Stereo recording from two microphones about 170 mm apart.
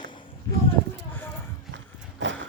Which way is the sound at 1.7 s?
90° right.